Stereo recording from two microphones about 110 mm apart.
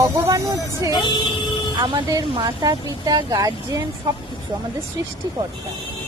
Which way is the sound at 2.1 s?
40° right (ahead or behind).